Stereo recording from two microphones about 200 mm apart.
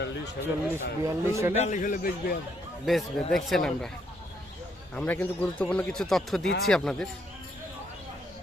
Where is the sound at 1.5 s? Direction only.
35° left (ahead or behind).